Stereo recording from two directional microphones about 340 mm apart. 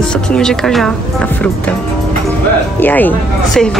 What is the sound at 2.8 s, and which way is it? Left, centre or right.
Speech, centre.